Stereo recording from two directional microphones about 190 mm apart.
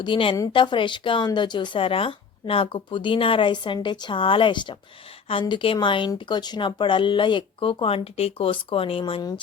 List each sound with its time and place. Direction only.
0.0 s speech: 25° left (ahead or behind)